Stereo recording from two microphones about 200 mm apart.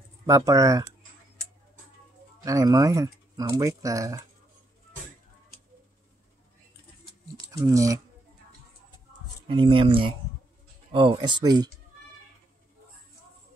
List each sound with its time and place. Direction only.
0.3 s speech: 15° right (ahead or behind)
2.4 s speech: 15° right (ahead or behind)
7.3 s speech: 15° right (ahead or behind)
9.5 s speech: 25° right (ahead or behind)